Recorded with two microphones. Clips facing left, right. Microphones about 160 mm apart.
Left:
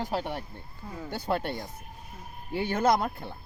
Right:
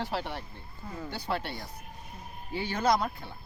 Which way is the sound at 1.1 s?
50° left (ahead or behind).